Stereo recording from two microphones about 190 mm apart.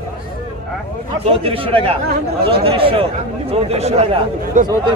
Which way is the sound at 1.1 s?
30° right (ahead or behind).